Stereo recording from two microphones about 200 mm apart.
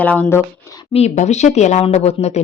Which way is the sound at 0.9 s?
35° left (ahead or behind).